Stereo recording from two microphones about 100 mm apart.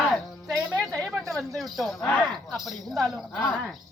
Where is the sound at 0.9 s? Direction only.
Centre (ahead or behind).